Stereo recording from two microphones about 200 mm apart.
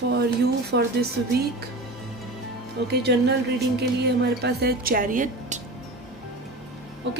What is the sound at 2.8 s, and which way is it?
A woman's voice, 55° right (ahead or behind).